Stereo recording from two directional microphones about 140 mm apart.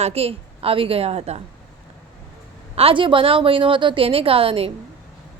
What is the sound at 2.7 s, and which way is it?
A woman's voice, 40° right (ahead or behind).